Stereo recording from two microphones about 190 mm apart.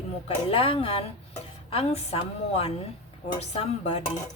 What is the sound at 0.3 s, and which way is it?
Speech, 30° left (ahead or behind).